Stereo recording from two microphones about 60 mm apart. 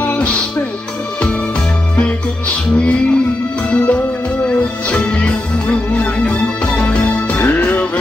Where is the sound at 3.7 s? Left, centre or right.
Left.